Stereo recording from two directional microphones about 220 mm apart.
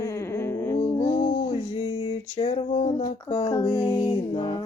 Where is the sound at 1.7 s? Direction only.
25° left (ahead or behind).